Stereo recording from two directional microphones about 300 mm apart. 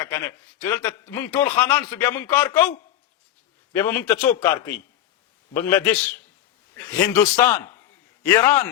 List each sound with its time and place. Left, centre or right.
0.0 s a man's voice: centre
3.7 s a man's voice: centre
5.7 s a man's voice: centre